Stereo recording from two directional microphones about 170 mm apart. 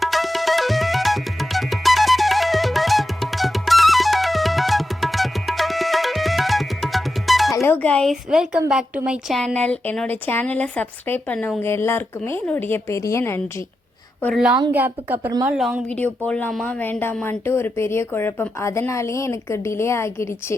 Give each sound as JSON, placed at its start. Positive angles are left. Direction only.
{"t": 0.0, "sound": "tabla", "side_deg": 0}
{"t": 7.5, "sound": "a woman's voice", "side_deg": 15}
{"t": 14.7, "sound": "a woman's voice", "side_deg": -10}
{"t": 15.2, "sound": "speech", "side_deg": -20}
{"t": 15.4, "sound": "a woman's voice", "side_deg": -5}
{"t": 16.2, "sound": "a woman's voice", "side_deg": 5}